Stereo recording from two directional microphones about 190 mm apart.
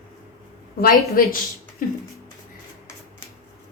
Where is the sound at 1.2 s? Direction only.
50° left (ahead or behind).